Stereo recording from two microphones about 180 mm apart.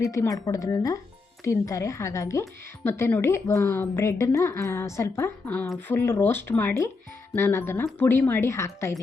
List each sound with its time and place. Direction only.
0.0 s speech: 15° left (ahead or behind)